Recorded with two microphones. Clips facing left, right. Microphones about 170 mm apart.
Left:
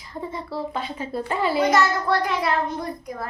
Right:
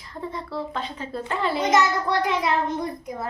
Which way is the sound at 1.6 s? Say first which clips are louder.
Right 2 dB; 20° right (ahead or behind).